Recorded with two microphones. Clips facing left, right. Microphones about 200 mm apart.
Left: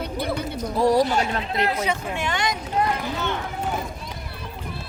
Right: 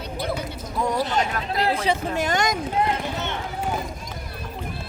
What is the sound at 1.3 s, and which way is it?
Speech, 25° left (ahead or behind).